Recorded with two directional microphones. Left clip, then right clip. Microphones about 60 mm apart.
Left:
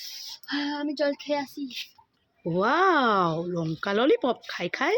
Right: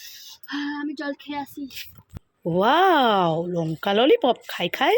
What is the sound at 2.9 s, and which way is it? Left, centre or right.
Speech, centre.